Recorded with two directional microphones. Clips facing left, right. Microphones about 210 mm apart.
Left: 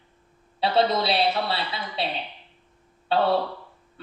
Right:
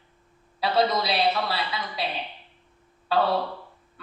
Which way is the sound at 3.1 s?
25° left (ahead or behind).